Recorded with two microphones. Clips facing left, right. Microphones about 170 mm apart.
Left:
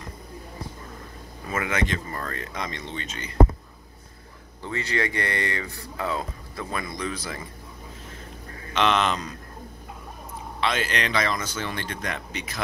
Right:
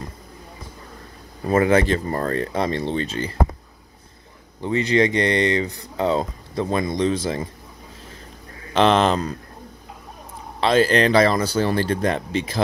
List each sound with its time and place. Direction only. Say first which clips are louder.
1.4 s speech: right 10 dB; 35° right (ahead or behind)
4.6 s speech: right 9 dB; 20° right (ahead or behind)
8.7 s speech: right 6 dB; 35° right (ahead or behind)
10.6 s speech: right 10 dB; 35° right (ahead or behind)